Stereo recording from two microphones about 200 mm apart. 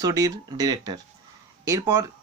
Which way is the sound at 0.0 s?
20° right (ahead or behind).